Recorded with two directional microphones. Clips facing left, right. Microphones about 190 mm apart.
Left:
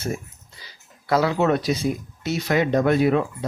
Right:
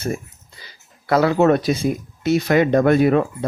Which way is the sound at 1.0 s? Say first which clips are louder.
Right 5 dB; 55° right (ahead or behind).